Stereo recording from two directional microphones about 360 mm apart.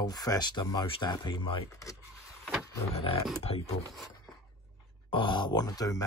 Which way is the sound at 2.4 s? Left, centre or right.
Centre.